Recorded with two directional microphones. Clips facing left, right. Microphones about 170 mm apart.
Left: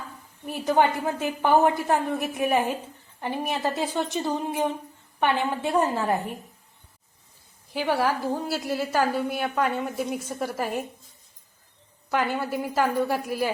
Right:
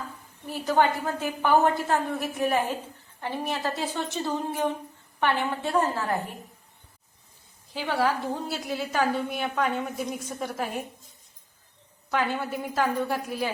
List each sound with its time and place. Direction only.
0.6 s a woman's voice: 15° left (ahead or behind)
7.7 s a woman's voice: 10° left (ahead or behind)
12.1 s a woman's voice: 5° left (ahead or behind)